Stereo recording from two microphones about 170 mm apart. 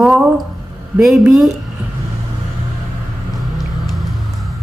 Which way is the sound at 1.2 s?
Centre (ahead or behind).